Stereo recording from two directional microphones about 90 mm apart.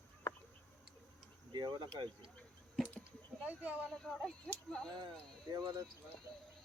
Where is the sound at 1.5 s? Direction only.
50° right (ahead or behind).